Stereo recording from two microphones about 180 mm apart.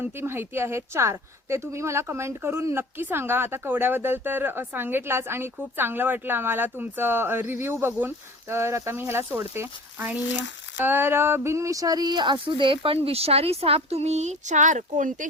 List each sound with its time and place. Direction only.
0.0 s speech: 10° right (ahead or behind); by 15.3 s 45° right (ahead or behind)